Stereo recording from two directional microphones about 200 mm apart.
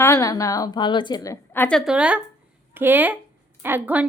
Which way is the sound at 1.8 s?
5° right (ahead or behind).